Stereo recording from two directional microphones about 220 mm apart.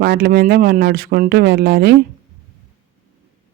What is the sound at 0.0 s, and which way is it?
Speech, 45° right (ahead or behind).